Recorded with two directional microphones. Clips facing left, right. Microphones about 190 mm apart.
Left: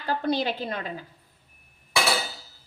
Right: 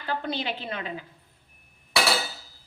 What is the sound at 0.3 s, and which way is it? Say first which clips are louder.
Speech: left 5 dB; 40° left (ahead or behind).